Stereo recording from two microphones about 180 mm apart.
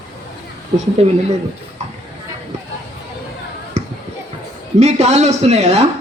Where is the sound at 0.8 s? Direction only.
35° right (ahead or behind).